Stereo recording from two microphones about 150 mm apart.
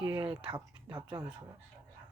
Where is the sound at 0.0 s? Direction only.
35° right (ahead or behind).